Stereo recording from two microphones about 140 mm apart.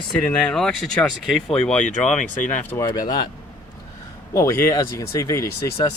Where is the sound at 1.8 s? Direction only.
65° left (ahead or behind).